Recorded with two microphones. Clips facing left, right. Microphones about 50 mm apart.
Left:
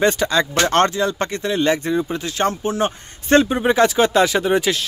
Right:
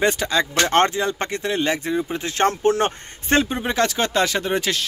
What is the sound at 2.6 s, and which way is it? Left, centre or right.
Speech, right.